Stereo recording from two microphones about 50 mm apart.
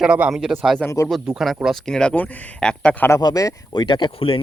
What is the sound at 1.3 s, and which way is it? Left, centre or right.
Speech, centre.